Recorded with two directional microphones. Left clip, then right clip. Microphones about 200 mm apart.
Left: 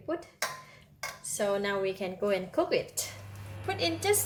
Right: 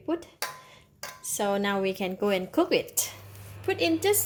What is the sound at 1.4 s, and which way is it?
A woman's voice, 45° right (ahead or behind).